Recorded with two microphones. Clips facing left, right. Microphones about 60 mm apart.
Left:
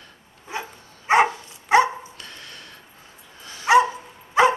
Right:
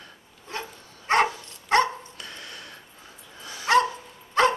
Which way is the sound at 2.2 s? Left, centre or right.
Right.